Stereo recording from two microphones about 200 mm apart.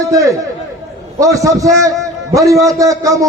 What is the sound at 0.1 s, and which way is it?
A man's voice, 15° right (ahead or behind).